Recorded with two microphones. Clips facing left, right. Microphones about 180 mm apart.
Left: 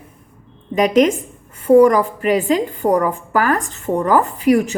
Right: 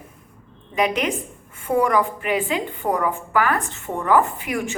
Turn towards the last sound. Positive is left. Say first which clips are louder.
# left 11 dB
turn(degrees=35)  # may be behind; listen again after turning